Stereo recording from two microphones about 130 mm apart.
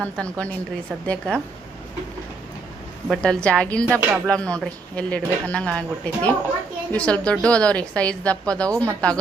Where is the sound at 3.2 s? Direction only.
10° left (ahead or behind).